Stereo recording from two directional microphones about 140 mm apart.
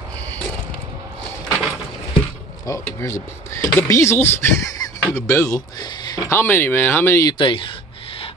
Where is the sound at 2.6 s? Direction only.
20° left (ahead or behind).